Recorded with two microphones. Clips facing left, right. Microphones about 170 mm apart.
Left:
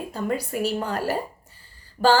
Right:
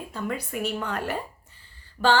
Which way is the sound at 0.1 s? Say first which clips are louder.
Left 4 dB; 40° left (ahead or behind).